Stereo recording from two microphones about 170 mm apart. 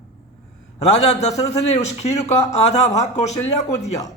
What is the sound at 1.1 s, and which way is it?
Speech, 40° left (ahead or behind).